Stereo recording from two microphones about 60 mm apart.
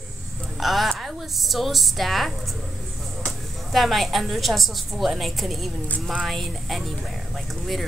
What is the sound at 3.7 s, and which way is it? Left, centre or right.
A woman's voice, centre.